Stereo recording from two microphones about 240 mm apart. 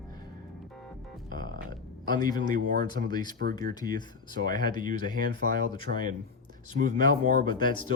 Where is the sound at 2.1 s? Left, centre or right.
Centre.